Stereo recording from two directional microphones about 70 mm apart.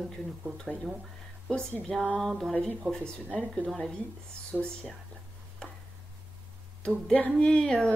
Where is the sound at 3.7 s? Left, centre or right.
Centre.